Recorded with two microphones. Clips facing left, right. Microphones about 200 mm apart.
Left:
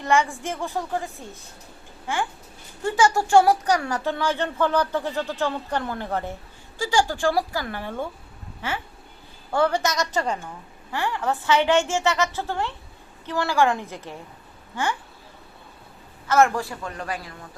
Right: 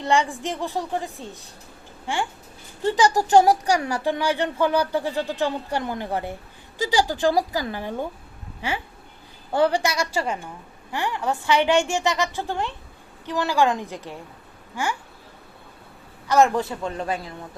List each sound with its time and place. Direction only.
0.0 s speech: 15° right (ahead or behind)
2.8 s a man's voice: 20° right (ahead or behind)
9.5 s speech: 15° right (ahead or behind)
10.9 s speech: 20° right (ahead or behind)
16.2 s a man's voice: 15° right (ahead or behind)